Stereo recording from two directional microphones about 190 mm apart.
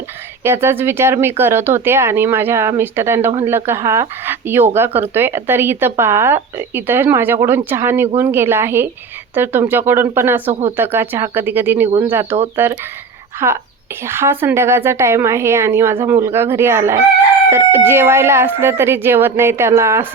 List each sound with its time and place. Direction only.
0.4 s speech: 10° right (ahead or behind)
10.5 s speech: 35° right (ahead or behind)
10.8 s speech: 10° right (ahead or behind)